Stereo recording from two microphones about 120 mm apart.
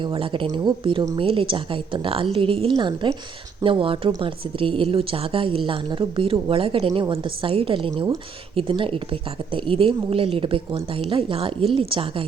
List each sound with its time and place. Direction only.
0.0 s a woman's voice: 45° right (ahead or behind)